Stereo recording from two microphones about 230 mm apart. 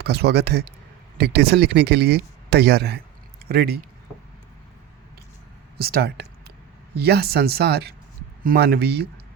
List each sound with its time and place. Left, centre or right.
0.0 s speech: right
5.7 s speech: right